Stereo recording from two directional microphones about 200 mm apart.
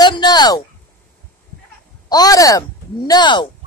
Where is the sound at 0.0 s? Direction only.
20° left (ahead or behind).